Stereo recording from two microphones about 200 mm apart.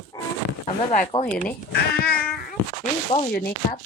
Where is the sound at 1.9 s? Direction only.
50° left (ahead or behind).